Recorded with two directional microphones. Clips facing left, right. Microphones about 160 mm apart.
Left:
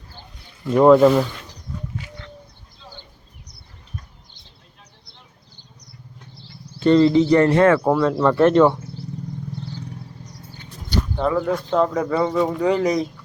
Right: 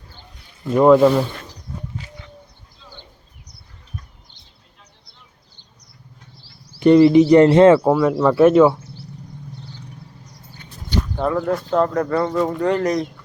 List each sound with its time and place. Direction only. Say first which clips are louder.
0.7 s speech: even; centre (ahead or behind)
6.7 s speech: right 4 dB; 15° right (ahead or behind)
7.9 s speech: right 2 dB; 10° right (ahead or behind)
11.2 s speech: even; centre (ahead or behind)